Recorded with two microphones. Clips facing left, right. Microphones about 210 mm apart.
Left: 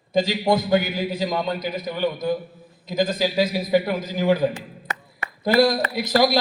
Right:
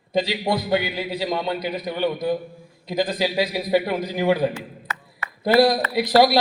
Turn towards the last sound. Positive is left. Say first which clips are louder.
# right 2 dB
turn(degrees=45)  # may be behind; listen again after turning